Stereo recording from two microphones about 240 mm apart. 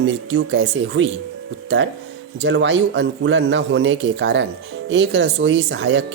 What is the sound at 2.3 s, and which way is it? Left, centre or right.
Speech, right.